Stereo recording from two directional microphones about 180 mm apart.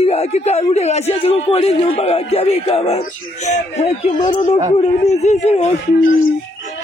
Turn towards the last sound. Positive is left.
turn(degrees=40)  # may be behind; listen again after turning